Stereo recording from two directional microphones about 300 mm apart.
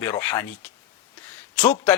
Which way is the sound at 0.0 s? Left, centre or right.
Centre.